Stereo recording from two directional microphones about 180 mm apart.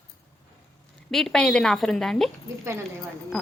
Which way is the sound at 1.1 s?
Centre (ahead or behind).